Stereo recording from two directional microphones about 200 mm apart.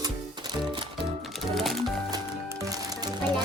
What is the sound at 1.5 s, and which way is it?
Music, centre (ahead or behind).